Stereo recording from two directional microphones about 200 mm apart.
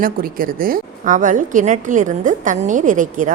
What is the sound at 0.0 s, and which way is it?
A woman's voice, 45° right (ahead or behind).